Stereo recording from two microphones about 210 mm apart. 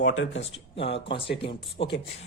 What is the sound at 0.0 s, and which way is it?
Speech, 65° left (ahead or behind).